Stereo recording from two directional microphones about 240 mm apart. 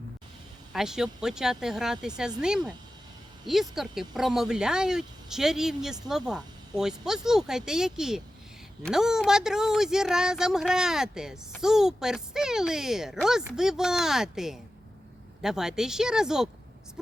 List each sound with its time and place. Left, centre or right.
0.7 s speech: centre